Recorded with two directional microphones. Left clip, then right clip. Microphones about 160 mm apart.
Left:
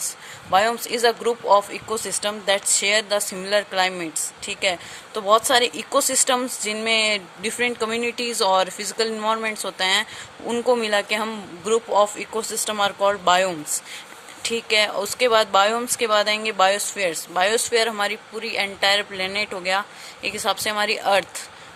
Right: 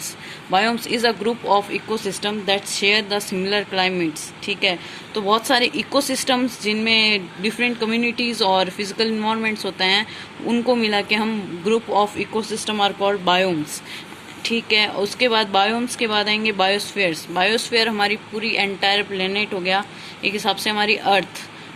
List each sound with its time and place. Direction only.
0.5 s speech: 50° left (ahead or behind)